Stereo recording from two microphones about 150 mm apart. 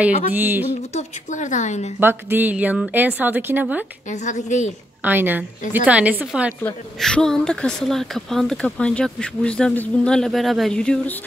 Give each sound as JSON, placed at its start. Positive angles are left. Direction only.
{"t": 0.3, "sound": "a woman's voice", "side_deg": -15}
{"t": 0.9, "sound": "a woman's voice", "side_deg": 55}
{"t": 2.0, "sound": "a woman's voice", "side_deg": -15}
{"t": 4.1, "sound": "a woman's voice", "side_deg": 55}
{"t": 5.0, "sound": "a woman's voice", "side_deg": -15}
{"t": 6.6, "sound": "speech", "side_deg": 5}